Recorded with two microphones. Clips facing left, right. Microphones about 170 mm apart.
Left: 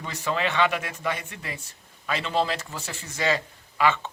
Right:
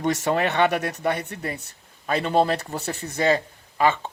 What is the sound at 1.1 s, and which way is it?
Speech, 40° right (ahead or behind).